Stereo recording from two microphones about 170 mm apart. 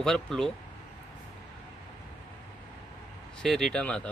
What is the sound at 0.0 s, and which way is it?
Speech, 5° left (ahead or behind).